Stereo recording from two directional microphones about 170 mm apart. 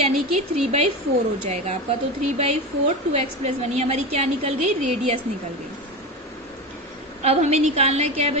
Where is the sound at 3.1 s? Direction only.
40° right (ahead or behind).